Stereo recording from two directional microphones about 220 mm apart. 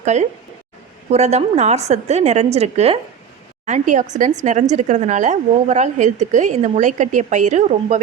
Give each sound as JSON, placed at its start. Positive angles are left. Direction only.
{"t": 0.0, "sound": "a woman's voice", "side_deg": -30}